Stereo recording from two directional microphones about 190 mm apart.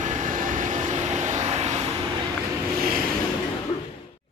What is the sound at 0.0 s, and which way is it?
Vehicle, 40° right (ahead or behind).